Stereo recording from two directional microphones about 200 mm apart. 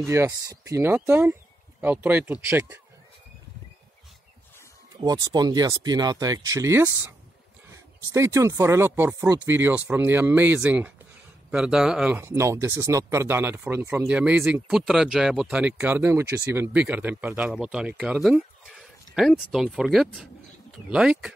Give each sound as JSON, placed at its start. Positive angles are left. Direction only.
{"t": 0.0, "sound": "speech", "side_deg": -15}
{"t": 5.0, "sound": "speech", "side_deg": -20}